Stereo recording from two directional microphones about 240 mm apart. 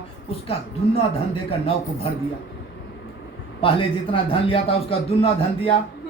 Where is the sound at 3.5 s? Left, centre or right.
Left.